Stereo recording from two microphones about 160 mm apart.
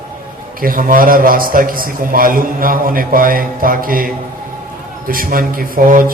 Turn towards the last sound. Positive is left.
turn(degrees=-60)  # may be behind; listen again after turning